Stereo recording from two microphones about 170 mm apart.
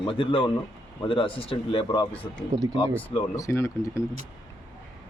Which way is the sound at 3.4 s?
15° left (ahead or behind).